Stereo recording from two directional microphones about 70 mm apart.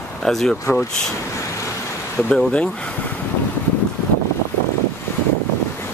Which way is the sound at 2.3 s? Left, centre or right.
Centre.